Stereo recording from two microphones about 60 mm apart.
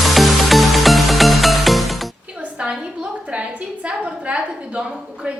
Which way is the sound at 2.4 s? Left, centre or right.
Centre.